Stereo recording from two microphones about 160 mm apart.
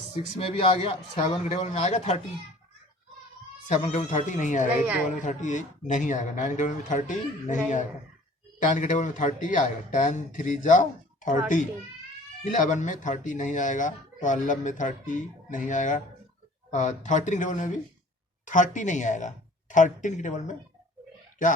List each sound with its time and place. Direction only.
0.3 s a man's voice: 35° left (ahead or behind)
3.7 s speech: 45° left (ahead or behind)